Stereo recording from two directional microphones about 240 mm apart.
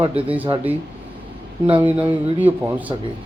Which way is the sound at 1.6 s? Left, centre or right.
Right.